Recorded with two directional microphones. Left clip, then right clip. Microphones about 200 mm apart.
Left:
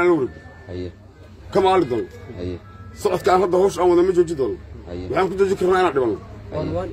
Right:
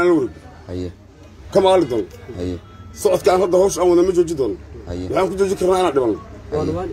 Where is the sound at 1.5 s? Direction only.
Centre (ahead or behind).